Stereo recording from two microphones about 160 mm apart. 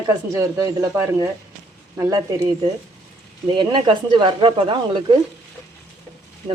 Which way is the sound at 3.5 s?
30° right (ahead or behind).